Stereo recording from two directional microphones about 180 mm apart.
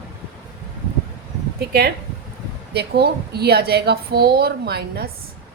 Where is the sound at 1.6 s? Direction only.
60° right (ahead or behind).